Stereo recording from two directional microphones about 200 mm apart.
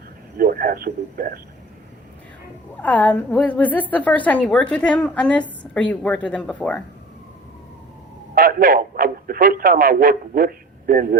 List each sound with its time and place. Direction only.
0.3 s a man's voice: 50° right (ahead or behind)
2.8 s a woman's voice: 5° left (ahead or behind)
8.4 s a man's voice: 45° right (ahead or behind)